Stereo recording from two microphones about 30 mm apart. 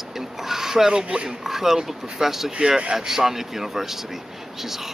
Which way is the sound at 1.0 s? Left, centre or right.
Right.